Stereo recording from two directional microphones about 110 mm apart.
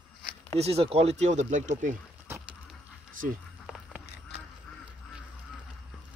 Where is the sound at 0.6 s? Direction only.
70° right (ahead or behind); by 1.7 s 90° right.